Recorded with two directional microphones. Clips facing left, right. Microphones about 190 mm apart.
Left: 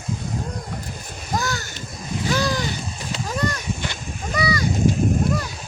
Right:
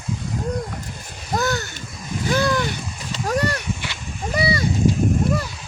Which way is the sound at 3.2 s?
70° right (ahead or behind).